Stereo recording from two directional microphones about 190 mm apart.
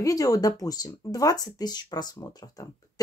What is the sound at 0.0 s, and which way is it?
Speech, 20° left (ahead or behind).